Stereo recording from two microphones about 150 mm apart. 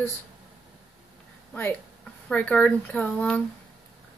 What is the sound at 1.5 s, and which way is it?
Speech, 10° left (ahead or behind).